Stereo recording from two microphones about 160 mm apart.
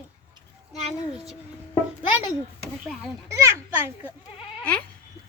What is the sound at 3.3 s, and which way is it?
Speech, 15° right (ahead or behind).